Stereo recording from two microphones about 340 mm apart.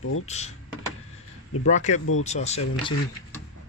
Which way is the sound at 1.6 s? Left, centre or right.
Left.